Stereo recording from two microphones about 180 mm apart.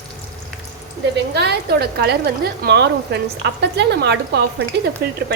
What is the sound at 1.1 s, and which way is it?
A woman's voice, 65° right (ahead or behind).